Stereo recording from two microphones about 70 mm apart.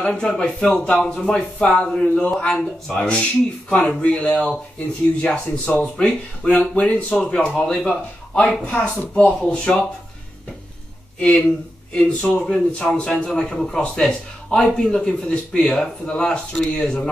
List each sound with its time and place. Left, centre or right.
0.0 s a man's voice: centre
4.0 s a man's voice: centre
11.9 s a man's voice: centre